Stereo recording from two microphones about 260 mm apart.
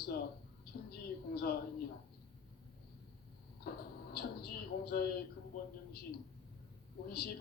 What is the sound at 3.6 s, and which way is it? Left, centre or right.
Speech, left.